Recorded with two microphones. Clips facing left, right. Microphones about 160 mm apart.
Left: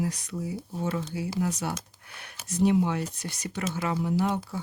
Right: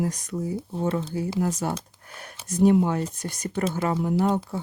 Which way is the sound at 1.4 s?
45° right (ahead or behind).